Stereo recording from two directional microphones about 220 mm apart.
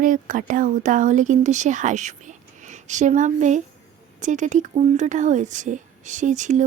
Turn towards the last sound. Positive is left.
turn(degrees=-35)  # may be behind; listen again after turning